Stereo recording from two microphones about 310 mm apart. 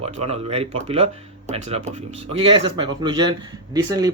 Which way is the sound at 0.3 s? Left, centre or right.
Centre.